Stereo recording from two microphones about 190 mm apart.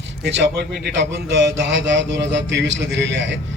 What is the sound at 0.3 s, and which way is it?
A man's voice, 65° right (ahead or behind).